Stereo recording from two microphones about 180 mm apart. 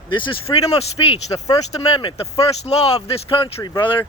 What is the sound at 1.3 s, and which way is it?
Speech, 20° left (ahead or behind).